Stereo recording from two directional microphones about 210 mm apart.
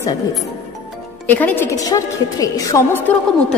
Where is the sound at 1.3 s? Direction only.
10° left (ahead or behind).